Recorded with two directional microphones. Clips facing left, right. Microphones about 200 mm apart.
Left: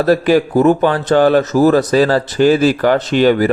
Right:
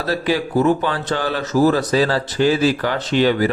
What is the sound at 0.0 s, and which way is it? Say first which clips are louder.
A man's voice: left 8 dB; 50° left (ahead or behind).